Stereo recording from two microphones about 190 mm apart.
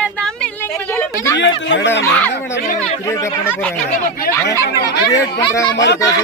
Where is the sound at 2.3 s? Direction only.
65° left (ahead or behind).